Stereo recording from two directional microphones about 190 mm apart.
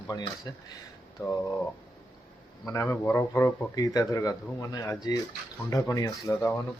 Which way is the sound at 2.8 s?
10° left (ahead or behind).